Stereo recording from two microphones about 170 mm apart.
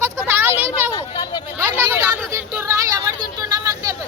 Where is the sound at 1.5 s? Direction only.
15° right (ahead or behind).